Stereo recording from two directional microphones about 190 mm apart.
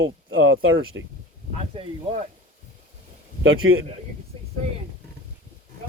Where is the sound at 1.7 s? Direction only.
30° right (ahead or behind).